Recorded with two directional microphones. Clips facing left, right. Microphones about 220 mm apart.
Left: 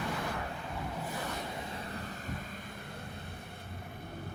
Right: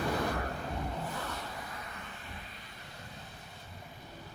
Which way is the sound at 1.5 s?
25° left (ahead or behind).